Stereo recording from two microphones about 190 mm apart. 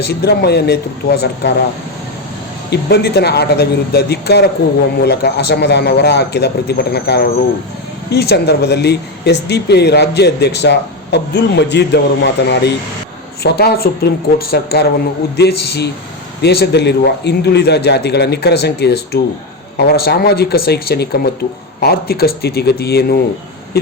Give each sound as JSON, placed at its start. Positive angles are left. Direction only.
{"t": 0.0, "sound": "speech", "side_deg": 60}
{"t": 2.6, "sound": "speech", "side_deg": 60}